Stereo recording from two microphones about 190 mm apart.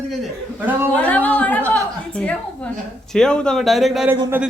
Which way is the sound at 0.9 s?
10° left (ahead or behind).